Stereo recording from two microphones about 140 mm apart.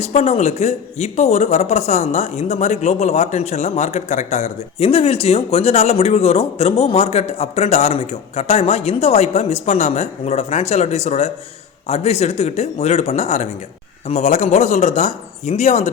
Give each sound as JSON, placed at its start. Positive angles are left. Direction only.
{"t": 0.0, "sound": "speech", "side_deg": 50}